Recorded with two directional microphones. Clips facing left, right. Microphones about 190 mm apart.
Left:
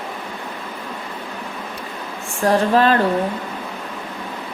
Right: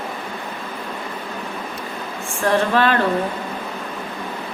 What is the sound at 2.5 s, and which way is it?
Speech, 35° left (ahead or behind).